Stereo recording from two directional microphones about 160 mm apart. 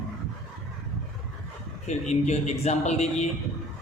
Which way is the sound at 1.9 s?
45° left (ahead or behind).